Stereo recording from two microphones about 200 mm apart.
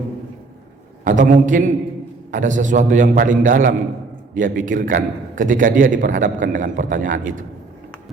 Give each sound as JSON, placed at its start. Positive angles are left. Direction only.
{"t": 1.0, "sound": "a man's voice", "side_deg": -40}